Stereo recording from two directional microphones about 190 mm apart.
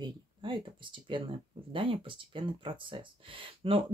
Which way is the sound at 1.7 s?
25° right (ahead or behind).